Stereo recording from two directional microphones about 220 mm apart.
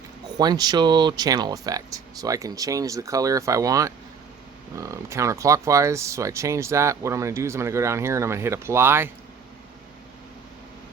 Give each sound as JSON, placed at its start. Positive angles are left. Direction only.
{"t": 0.3, "sound": "speech", "side_deg": -20}